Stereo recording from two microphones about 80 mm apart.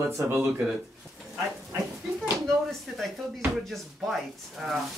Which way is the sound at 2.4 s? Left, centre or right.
Centre.